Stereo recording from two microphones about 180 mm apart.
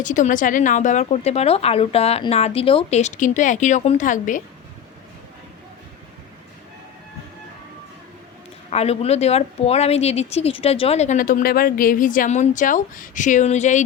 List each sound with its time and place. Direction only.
0.0 s speech: 45° left (ahead or behind)
8.7 s speech: 35° left (ahead or behind)